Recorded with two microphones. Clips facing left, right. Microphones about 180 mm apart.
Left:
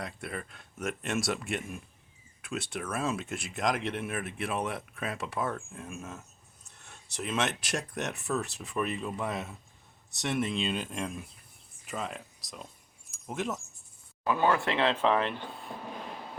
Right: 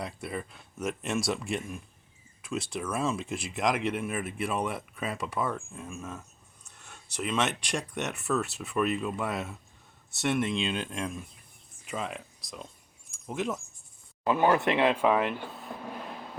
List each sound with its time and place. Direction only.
0.0 s speech: centre (ahead or behind)
13.1 s a sound: centre (ahead or behind)
14.3 s speech: 20° right (ahead or behind)